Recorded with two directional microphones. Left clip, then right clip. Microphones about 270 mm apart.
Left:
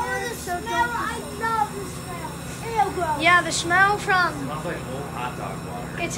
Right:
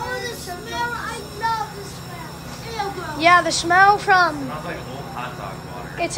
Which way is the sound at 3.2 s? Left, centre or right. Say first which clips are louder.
Right 5 dB; centre.